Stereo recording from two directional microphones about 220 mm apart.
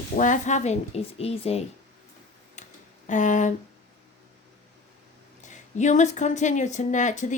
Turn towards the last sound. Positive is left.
turn(degrees=35)  # may be behind; listen again after turning